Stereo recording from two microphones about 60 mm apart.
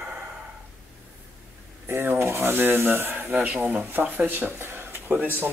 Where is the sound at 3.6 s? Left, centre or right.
Right.